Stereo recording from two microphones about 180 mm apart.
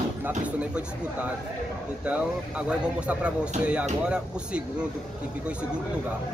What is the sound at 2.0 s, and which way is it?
Speech, 5° right (ahead or behind).